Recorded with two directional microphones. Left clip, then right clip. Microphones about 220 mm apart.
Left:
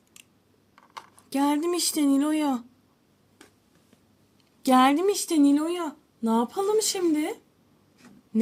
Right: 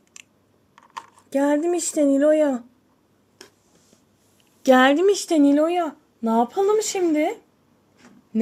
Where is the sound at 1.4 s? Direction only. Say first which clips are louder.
Right 3 dB; 35° left (ahead or behind).